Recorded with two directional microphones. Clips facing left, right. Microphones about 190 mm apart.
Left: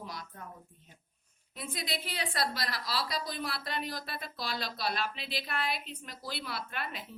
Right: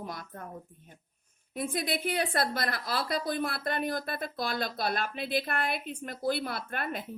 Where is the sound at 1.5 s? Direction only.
50° right (ahead or behind).